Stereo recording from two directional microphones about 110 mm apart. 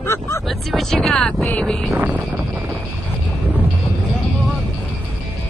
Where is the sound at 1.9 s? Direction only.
15° right (ahead or behind).